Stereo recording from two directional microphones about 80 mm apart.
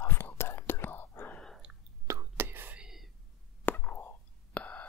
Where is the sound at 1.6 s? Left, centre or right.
Centre.